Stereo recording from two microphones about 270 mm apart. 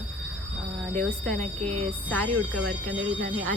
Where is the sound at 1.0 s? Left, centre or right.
Centre.